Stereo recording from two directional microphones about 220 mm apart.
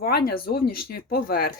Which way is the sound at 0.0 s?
45° left (ahead or behind).